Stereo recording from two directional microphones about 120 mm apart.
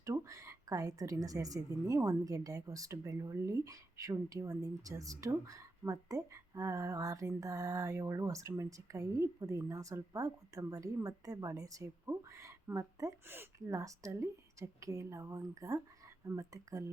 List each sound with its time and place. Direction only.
0.0 s speech: 25° right (ahead or behind)